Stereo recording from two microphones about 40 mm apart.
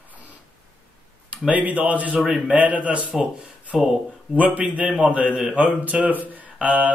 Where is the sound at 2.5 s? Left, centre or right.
Right.